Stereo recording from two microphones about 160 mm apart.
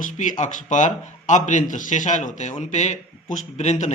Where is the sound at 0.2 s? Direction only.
50° left (ahead or behind).